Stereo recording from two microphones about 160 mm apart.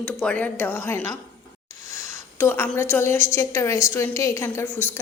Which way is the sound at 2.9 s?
15° left (ahead or behind).